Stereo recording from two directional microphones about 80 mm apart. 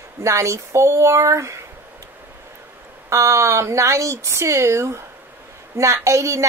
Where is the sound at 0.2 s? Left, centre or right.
Right.